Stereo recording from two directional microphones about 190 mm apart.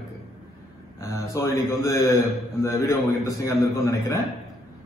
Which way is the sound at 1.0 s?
15° left (ahead or behind).